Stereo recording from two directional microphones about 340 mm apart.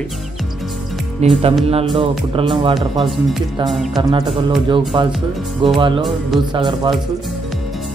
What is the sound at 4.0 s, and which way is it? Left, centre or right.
Speech, centre.